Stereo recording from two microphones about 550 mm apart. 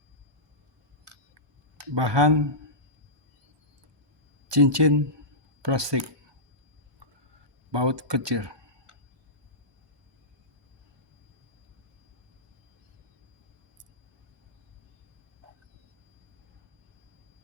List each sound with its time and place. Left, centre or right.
2.0 s speech: right
4.5 s speech: right
7.7 s speech: right